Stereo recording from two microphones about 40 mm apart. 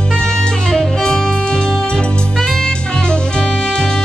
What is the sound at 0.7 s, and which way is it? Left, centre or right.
Music, left.